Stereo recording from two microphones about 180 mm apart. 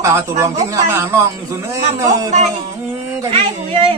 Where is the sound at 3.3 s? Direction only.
30° right (ahead or behind).